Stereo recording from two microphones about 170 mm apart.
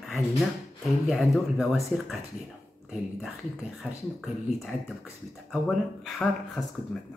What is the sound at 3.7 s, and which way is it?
Speech, centre (ahead or behind).